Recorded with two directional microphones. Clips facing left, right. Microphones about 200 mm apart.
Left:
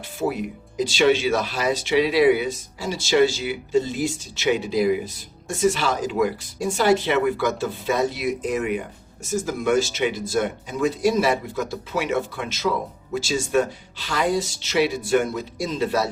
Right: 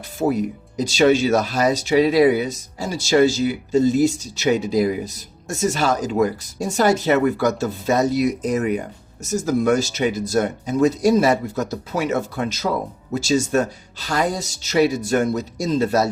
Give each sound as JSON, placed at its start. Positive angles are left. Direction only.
{"t": 0.2, "sound": "speech", "side_deg": -40}